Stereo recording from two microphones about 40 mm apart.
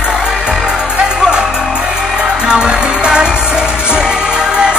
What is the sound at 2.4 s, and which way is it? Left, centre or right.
Music, right.